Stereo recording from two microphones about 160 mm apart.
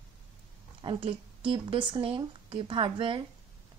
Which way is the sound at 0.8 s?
30° right (ahead or behind).